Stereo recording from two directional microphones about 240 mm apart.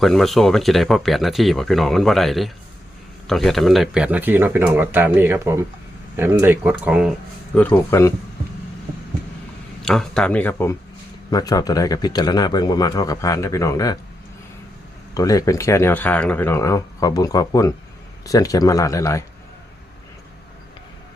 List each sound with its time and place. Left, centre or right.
0.0 s speech: centre
7.5 s speech: centre
9.8 s speech: centre
15.1 s speech: centre